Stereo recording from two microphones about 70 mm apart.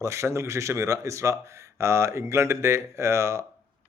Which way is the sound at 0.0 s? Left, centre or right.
Right.